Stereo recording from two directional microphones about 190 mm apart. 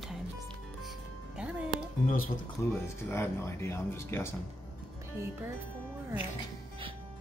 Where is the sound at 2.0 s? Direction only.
45° left (ahead or behind).